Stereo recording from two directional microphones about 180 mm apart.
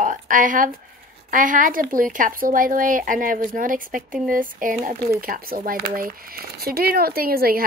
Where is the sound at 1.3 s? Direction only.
45° right (ahead or behind).